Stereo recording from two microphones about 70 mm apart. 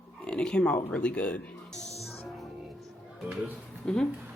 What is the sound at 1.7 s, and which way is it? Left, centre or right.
Music, centre.